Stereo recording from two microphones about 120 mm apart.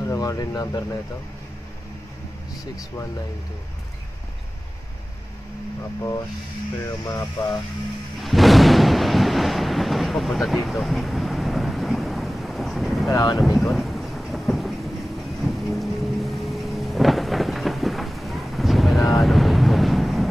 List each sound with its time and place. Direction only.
0.1 s speech: 30° left (ahead or behind)
7.1 s speech: 30° left (ahead or behind)
8.2 s thunder: centre (ahead or behind)
13.1 s speech: 30° left (ahead or behind)
13.4 s thunder: centre (ahead or behind)
15.4 s boat: centre (ahead or behind)
19.1 s wind noise: centre (ahead or behind)